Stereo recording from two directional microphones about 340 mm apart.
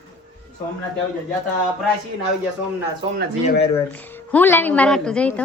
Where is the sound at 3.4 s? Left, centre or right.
Centre.